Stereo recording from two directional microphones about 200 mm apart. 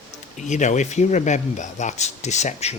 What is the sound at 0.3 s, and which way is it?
Speech, 35° left (ahead or behind).